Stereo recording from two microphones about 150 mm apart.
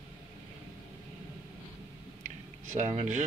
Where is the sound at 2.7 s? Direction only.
50° right (ahead or behind).